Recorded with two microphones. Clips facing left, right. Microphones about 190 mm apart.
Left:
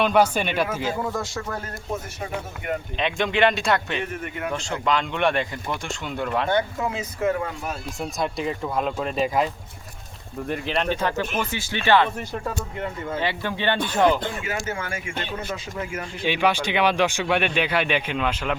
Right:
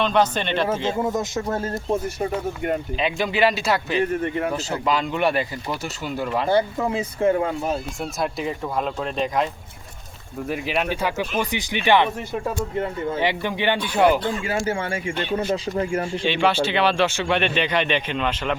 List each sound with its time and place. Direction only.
0.0 s speech: 10° left (ahead or behind)
0.9 s speech: 25° right (ahead or behind)
3.0 s speech: 5° right (ahead or behind)
4.2 s speech: 30° right (ahead or behind)
4.5 s speech: 5° right (ahead or behind)
6.5 s speech: 30° right (ahead or behind)
8.2 s speech: centre (ahead or behind)
13.1 s speech: 15° right (ahead or behind)
14.4 s speech: 30° right (ahead or behind)
16.1 s speech: 10° left (ahead or behind)